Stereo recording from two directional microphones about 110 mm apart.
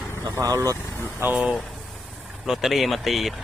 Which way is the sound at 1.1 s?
15° right (ahead or behind).